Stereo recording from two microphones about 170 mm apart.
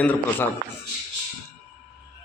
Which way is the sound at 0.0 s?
10° left (ahead or behind).